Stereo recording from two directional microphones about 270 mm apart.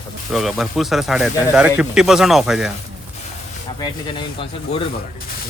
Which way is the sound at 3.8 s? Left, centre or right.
Centre.